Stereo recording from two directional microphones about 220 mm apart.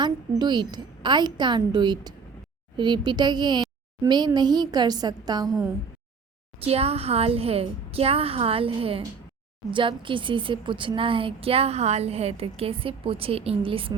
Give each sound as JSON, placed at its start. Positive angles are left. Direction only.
{"t": 0.0, "sound": "a woman's voice", "side_deg": -20}
{"t": 6.6, "sound": "a woman's voice", "side_deg": -25}